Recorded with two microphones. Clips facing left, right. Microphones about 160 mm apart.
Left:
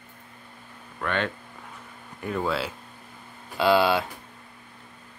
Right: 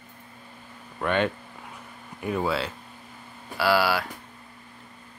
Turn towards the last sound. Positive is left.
turn(degrees=20)  # may be behind; listen again after turning